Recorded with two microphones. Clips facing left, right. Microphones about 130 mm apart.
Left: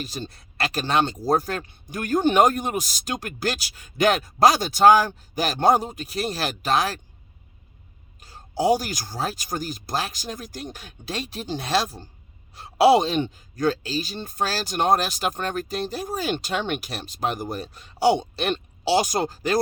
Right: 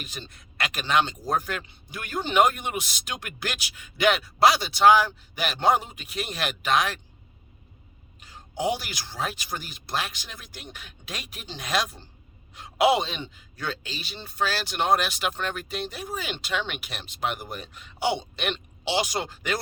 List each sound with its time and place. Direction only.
0.0 s speech: 35° left (ahead or behind)
8.2 s speech: 35° left (ahead or behind)